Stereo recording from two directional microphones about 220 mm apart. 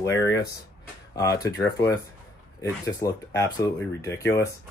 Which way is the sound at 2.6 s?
15° left (ahead or behind).